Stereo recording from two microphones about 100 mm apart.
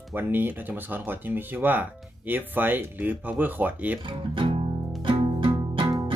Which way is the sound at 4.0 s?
55° right (ahead or behind).